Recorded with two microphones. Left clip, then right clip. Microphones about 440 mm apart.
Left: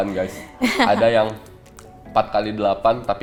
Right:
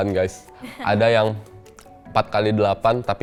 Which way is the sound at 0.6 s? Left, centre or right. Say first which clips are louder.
Left 19 dB; left.